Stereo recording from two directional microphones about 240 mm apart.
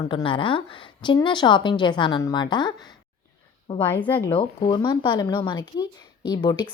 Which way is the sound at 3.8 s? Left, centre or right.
Centre.